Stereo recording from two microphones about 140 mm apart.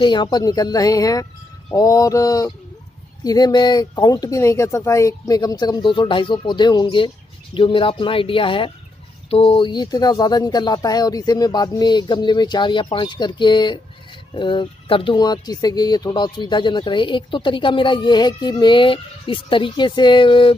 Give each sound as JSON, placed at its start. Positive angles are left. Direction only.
{"t": 0.0, "sound": "speech", "side_deg": 30}